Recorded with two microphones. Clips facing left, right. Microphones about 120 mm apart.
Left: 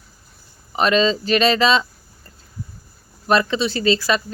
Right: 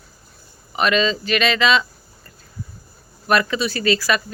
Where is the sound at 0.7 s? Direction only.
35° left (ahead or behind).